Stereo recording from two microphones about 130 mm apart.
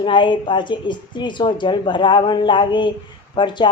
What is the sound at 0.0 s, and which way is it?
Speech, 40° left (ahead or behind).